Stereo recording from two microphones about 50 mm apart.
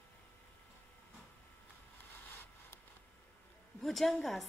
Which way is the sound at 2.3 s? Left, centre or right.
Left.